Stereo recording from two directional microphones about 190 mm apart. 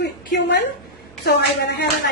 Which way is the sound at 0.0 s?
65° left (ahead or behind).